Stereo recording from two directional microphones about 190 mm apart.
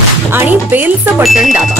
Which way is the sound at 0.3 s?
10° right (ahead or behind).